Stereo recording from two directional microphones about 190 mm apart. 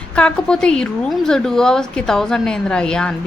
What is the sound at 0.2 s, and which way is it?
A woman's voice, 5° left (ahead or behind).